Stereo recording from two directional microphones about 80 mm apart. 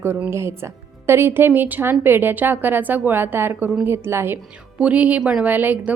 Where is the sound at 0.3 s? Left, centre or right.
Right.